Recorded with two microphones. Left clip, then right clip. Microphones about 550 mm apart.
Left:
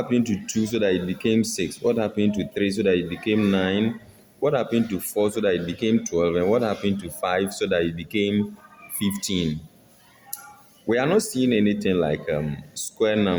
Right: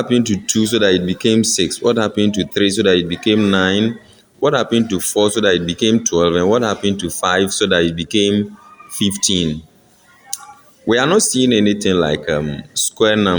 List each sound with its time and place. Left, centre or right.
0.0 s speech: left
10.8 s speech: left